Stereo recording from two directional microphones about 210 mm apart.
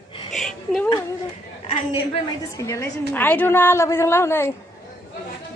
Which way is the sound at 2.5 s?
15° left (ahead or behind).